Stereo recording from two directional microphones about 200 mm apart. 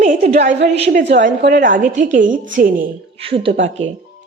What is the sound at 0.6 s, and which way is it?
A woman's voice, 35° right (ahead or behind).